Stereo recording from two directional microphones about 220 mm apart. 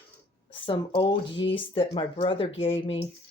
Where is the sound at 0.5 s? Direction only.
20° left (ahead or behind).